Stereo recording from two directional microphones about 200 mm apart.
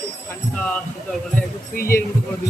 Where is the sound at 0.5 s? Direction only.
5° left (ahead or behind).